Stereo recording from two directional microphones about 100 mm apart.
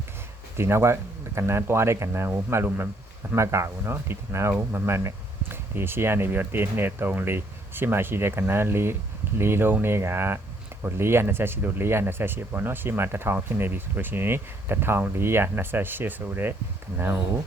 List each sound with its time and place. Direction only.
0.5 s speech: 25° right (ahead or behind)